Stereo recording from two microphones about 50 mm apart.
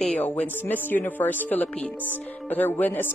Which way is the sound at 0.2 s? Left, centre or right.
Left.